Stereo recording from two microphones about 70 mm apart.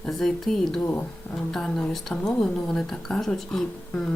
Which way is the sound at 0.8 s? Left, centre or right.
Left.